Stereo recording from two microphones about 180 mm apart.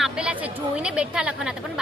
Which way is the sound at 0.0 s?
5° right (ahead or behind).